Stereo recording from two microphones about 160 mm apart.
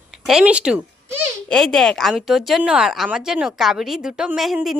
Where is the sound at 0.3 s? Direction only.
5° right (ahead or behind).